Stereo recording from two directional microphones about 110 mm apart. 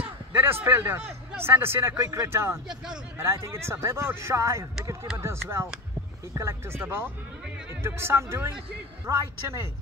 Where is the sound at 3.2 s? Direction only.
25° right (ahead or behind).